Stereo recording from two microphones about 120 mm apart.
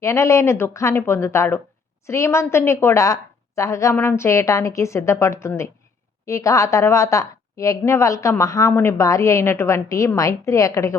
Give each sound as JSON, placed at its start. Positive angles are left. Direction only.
{"t": 0.0, "sound": "a woman's voice", "side_deg": 25}